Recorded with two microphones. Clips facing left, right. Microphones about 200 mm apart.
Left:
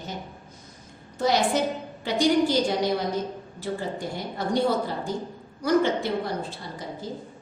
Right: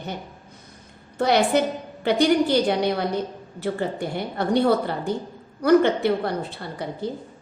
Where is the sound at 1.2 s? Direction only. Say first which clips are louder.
Right 3 dB; 60° right (ahead or behind).